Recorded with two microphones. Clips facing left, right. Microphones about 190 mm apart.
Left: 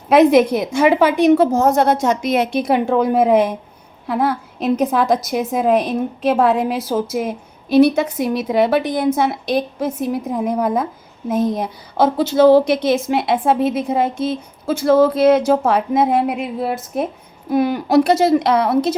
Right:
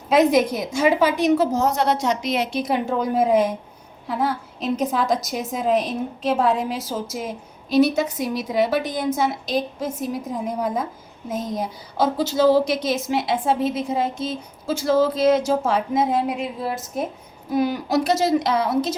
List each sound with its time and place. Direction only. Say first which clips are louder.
0.1 s a woman's voice: left 6 dB; 60° left (ahead or behind)